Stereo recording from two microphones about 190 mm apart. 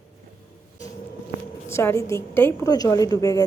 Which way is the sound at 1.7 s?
15° left (ahead or behind).